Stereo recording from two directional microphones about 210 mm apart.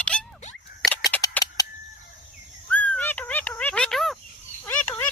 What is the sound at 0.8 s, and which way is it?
Scissors, centre (ahead or behind).